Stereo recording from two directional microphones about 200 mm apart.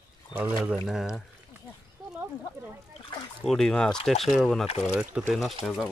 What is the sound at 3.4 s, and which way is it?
Speech, 5° left (ahead or behind).